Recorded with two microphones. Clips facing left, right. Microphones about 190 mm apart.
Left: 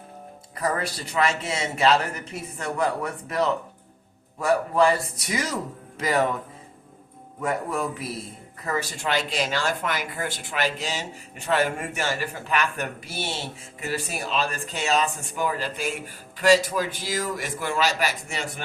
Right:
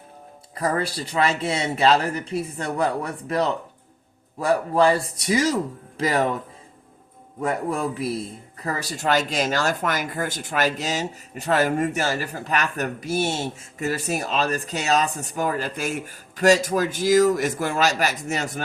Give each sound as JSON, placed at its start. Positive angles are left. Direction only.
{"t": 0.5, "sound": "a man's voice", "side_deg": -35}
{"t": 7.4, "sound": "a man's voice", "side_deg": -35}